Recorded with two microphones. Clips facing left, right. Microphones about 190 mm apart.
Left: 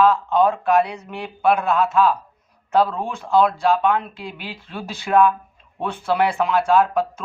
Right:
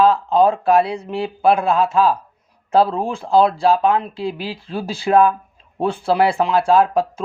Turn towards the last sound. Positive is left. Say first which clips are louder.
# right 2 dB
turn(degrees=-30)  # may be behind; listen again after turning